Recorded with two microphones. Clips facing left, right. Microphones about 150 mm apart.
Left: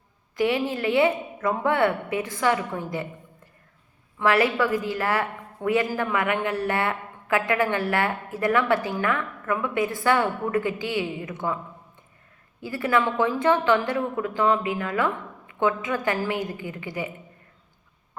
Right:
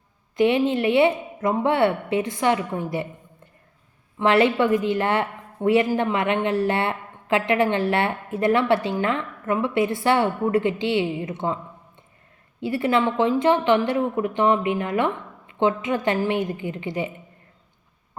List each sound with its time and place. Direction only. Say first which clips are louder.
0.3 s a woman's voice: right 5 dB; 20° right (ahead or behind)